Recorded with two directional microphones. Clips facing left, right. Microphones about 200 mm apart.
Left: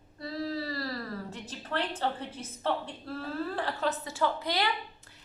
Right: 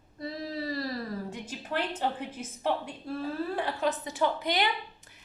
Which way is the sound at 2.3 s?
15° right (ahead or behind).